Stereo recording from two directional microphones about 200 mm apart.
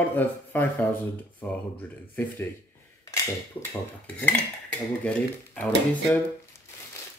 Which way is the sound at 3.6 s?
10° left (ahead or behind).